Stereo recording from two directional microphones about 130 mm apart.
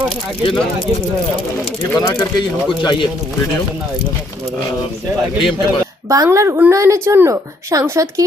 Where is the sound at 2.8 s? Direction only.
35° left (ahead or behind).